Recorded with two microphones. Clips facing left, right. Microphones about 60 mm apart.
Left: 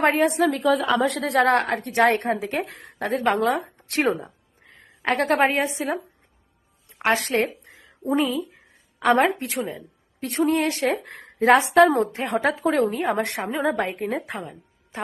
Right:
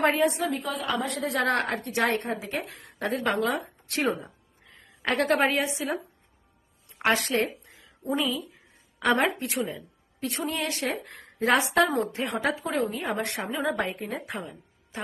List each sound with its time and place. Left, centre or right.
0.0 s a woman's voice: left
0.3 s a woman's voice: left
1.4 s a woman's voice: left
7.0 s speech: left
7.6 s a sound: left
9.6 s speech: left
12.6 s a woman's voice: left